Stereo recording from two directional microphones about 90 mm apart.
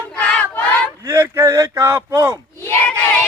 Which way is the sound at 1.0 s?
30° right (ahead or behind).